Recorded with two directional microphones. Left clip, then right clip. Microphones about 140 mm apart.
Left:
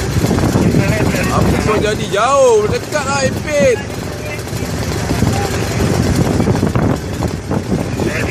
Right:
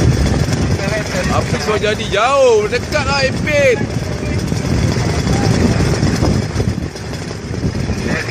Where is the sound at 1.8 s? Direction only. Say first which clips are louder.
Even; 10° left (ahead or behind).